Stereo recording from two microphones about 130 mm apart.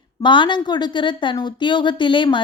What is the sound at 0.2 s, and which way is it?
A woman's voice, 40° left (ahead or behind).